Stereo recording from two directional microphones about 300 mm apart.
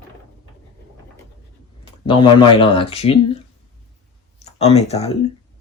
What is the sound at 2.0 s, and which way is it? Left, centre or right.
Speech, centre.